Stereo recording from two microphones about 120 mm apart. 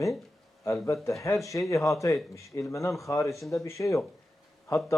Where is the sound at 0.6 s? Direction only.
25° left (ahead or behind).